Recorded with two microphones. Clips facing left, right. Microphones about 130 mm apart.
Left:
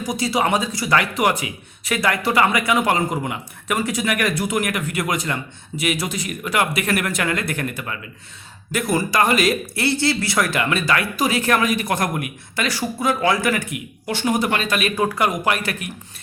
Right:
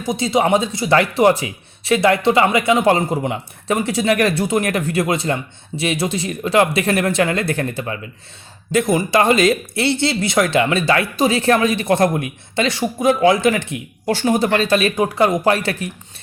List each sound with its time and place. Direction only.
0.0 s speech: 25° right (ahead or behind)